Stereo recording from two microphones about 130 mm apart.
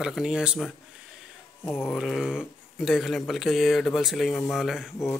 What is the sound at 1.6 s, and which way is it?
Speech, 15° left (ahead or behind).